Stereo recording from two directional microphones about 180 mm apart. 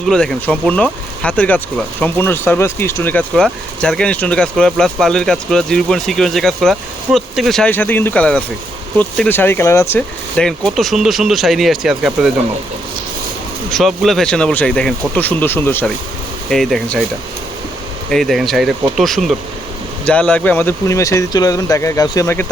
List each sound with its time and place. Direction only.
0.1 s speech: 5° left (ahead or behind)
13.7 s speech: centre (ahead or behind)
18.1 s speech: centre (ahead or behind); by 22.4 s 15° left (ahead or behind)